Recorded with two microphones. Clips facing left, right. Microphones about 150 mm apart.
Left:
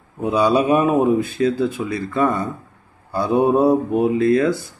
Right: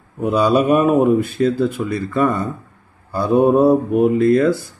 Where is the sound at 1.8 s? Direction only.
10° left (ahead or behind).